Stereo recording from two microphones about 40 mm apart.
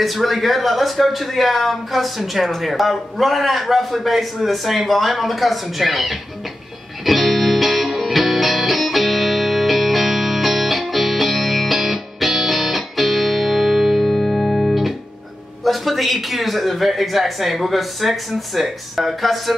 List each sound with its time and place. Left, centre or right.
0.0 s a man's voice: centre
7.1 s music: centre
15.6 s a man's voice: centre